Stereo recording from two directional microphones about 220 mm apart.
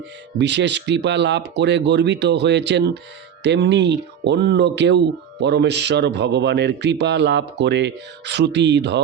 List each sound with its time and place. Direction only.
0.3 s speech: 50° right (ahead or behind)